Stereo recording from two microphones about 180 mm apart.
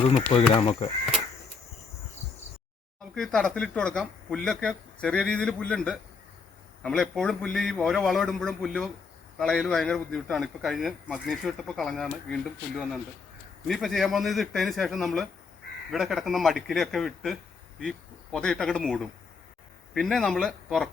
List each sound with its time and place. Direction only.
0.1 s speech: 30° left (ahead or behind)
3.2 s a man's voice: 5° left (ahead or behind)